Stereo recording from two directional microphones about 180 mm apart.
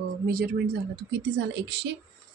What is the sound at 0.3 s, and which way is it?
A woman's voice, 55° right (ahead or behind).